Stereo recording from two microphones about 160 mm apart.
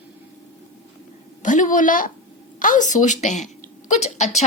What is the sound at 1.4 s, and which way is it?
A woman's voice, 50° left (ahead or behind).